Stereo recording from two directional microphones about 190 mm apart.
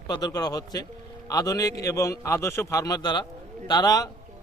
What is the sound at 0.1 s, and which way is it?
A man's voice, 20° left (ahead or behind).